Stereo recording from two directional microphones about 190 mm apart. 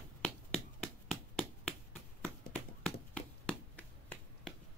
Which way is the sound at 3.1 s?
5° left (ahead or behind).